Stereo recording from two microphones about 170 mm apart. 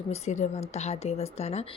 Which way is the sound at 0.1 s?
40° left (ahead or behind).